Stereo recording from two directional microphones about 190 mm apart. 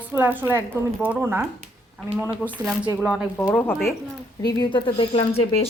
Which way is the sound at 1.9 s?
Centre (ahead or behind).